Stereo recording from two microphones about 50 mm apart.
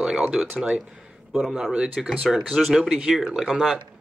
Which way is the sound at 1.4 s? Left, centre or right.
Centre.